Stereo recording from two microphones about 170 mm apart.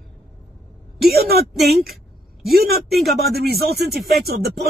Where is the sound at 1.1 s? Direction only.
65° right (ahead or behind).